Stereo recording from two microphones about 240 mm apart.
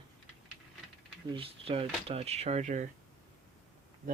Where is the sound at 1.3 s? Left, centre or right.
Right.